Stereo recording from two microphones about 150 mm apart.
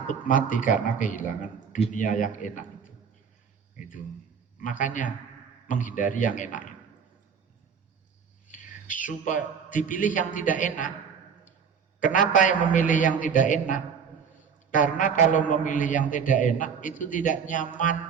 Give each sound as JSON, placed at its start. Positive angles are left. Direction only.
{"t": 0.1, "sound": "a man's voice", "side_deg": 60}
{"t": 3.8, "sound": "a man's voice", "side_deg": 60}
{"t": 8.4, "sound": "a man's voice", "side_deg": 60}
{"t": 11.9, "sound": "a man's voice", "side_deg": 60}